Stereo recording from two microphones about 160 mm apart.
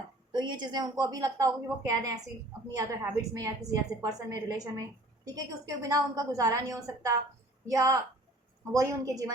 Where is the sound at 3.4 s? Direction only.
20° right (ahead or behind).